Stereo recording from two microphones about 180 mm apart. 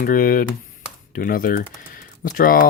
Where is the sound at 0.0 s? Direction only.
50° left (ahead or behind).